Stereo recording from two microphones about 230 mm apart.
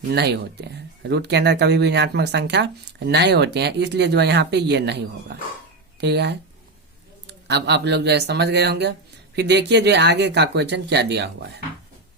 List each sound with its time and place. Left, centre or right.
0.1 s speech: right